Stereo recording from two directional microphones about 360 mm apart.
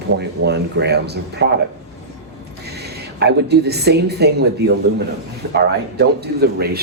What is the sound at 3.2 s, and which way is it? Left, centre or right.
Speech, right.